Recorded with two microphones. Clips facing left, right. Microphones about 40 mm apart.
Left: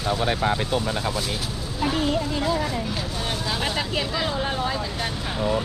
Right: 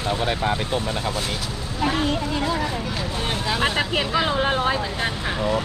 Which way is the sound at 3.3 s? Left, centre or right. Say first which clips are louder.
Right 5 dB; right.